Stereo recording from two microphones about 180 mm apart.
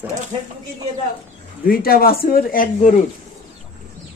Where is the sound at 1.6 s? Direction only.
55° left (ahead or behind).